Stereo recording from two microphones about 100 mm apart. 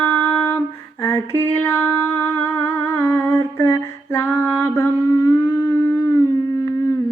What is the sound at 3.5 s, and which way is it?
Female singing, 25° left (ahead or behind).